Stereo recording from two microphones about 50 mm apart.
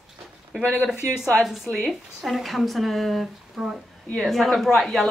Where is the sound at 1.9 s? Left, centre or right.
Centre.